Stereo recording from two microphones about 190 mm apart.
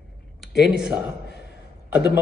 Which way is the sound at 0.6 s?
Centre (ahead or behind).